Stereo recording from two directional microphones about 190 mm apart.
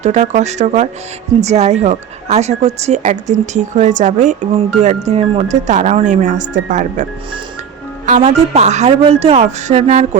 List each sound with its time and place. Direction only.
0.0 s speech: 35° right (ahead or behind)